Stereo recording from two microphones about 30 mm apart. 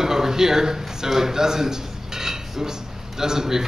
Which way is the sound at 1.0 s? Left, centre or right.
Centre.